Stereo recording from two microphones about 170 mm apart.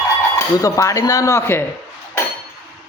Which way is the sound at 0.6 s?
20° left (ahead or behind).